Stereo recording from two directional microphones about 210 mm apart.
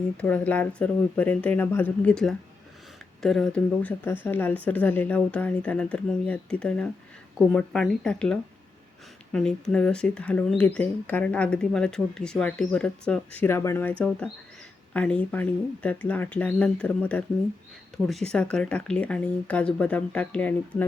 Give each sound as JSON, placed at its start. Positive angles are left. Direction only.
{"t": 0.2, "sound": "speech", "side_deg": 5}
{"t": 14.9, "sound": "speech", "side_deg": 5}